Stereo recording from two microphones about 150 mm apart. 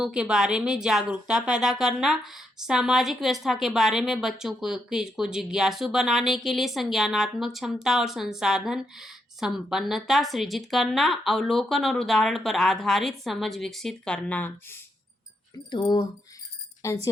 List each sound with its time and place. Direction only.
0.0 s speech: 5° right (ahead or behind)
15.7 s speech: 30° left (ahead or behind)
16.8 s speech: 20° left (ahead or behind)